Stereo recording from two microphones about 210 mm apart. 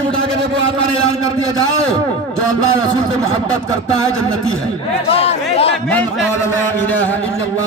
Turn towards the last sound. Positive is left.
turn(degrees=30)  # may be behind; listen again after turning